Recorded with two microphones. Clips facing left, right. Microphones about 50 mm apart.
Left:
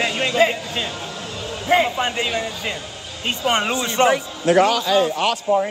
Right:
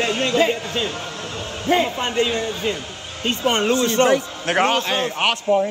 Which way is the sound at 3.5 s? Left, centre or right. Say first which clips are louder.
Right 2 dB; centre.